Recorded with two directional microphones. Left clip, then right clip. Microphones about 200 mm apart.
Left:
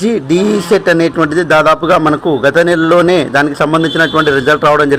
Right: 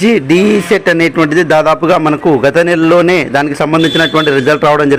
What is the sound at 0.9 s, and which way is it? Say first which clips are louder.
Speech: right 1 dB; 35° right (ahead or behind).